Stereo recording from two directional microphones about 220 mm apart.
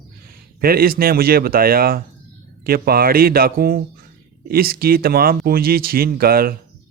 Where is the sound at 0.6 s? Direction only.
40° right (ahead or behind).